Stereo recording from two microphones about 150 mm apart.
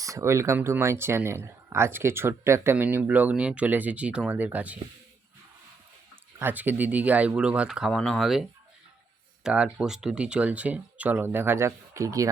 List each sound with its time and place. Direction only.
0.0 s speech: 20° right (ahead or behind)
6.4 s speech: 10° right (ahead or behind)